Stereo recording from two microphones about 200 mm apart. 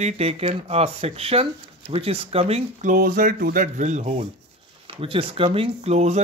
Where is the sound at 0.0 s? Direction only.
30° right (ahead or behind).